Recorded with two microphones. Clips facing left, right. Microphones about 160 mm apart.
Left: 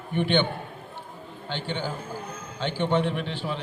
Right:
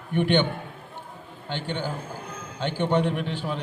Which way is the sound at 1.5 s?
50° right (ahead or behind).